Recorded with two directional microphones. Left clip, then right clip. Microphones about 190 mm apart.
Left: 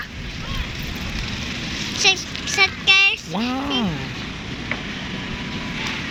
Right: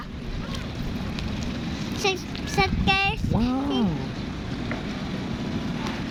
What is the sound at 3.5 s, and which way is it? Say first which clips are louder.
Speech: left 4 dB; centre (ahead or behind).